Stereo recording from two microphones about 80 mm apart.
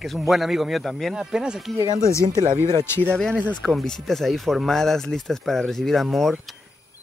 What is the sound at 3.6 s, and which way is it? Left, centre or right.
Speech, centre.